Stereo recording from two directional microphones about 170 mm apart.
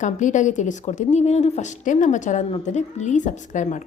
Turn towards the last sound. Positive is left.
turn(degrees=45)  # may be behind; listen again after turning